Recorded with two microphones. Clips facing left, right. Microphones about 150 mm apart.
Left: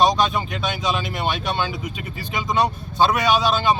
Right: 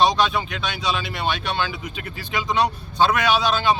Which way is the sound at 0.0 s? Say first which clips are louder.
Left 1 dB; 45° left (ahead or behind).